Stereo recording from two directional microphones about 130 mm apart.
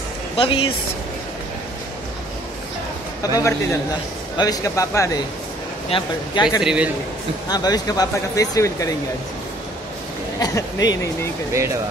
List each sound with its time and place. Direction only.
0.4 s speech: 40° left (ahead or behind)
3.2 s a man's voice: 25° left (ahead or behind)
5.9 s speech: 40° left (ahead or behind)
6.6 s a man's voice: 5° right (ahead or behind)
7.4 s speech: 30° left (ahead or behind)
10.4 s speech: 30° left (ahead or behind)
11.5 s speech: 25° right (ahead or behind)